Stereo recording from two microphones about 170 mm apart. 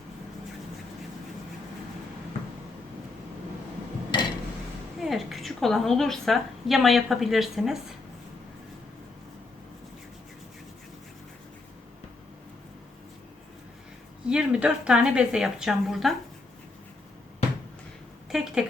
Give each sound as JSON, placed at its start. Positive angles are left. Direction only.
{"t": 4.1, "sound": "a sound", "side_deg": 25}
{"t": 4.9, "sound": "a woman's voice", "side_deg": 0}
{"t": 14.3, "sound": "a woman's voice", "side_deg": -5}
{"t": 18.3, "sound": "speech", "side_deg": -5}